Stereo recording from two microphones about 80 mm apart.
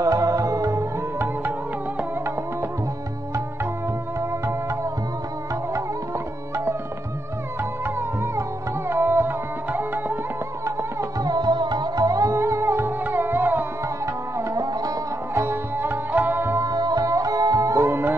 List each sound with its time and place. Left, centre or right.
0.0 s music: right
4.2 s music: right
5.7 s tabla: right
7.8 s music: right
10.6 s music: right
11.1 s music: right
12.4 s music: right
14.0 s music: right
15.3 s sitar: right
16.5 s music: right
17.8 s music: right